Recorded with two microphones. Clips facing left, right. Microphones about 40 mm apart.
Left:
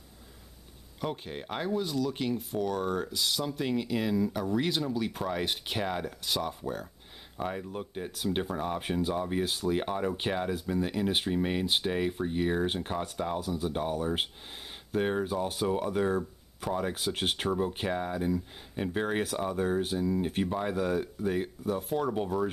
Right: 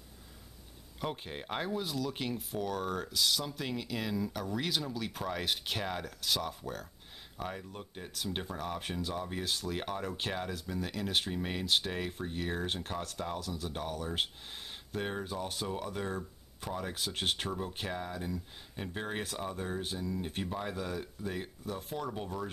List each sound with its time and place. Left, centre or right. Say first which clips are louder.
1.0 s speech: left 3 dB; centre
20.7 s speech: left 9 dB; left